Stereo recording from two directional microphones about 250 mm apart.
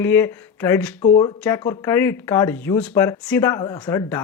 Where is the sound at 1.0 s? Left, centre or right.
Left.